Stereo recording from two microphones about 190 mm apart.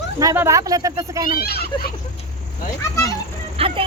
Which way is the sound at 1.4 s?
55° left (ahead or behind).